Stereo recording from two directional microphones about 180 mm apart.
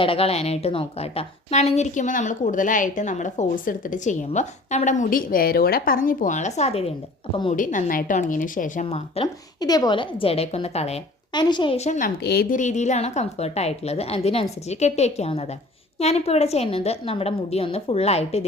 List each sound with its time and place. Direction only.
0.0 s a woman's voice: 30° left (ahead or behind)
7.5 s a woman's voice: 45° left (ahead or behind)
9.6 s a woman's voice: 20° left (ahead or behind)
11.3 s a woman's voice: 25° left (ahead or behind)